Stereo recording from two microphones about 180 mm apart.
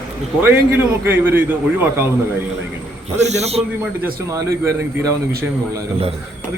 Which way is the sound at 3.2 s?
40° right (ahead or behind).